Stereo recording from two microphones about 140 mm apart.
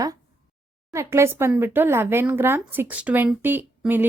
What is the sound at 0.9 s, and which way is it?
Speech, 20° right (ahead or behind).